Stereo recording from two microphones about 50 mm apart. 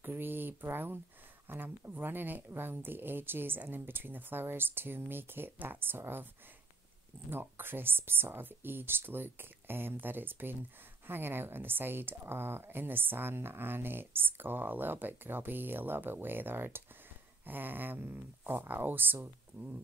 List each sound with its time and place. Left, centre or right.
0.0 s a woman's voice: right
7.2 s a woman's voice: right